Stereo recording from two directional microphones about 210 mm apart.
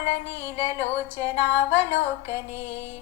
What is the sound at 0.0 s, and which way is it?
Music, 30° left (ahead or behind).